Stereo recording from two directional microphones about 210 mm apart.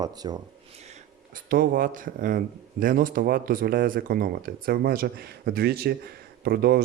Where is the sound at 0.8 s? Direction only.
35° right (ahead or behind).